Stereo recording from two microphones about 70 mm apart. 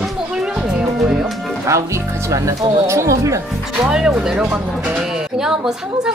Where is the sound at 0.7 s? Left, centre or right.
Centre.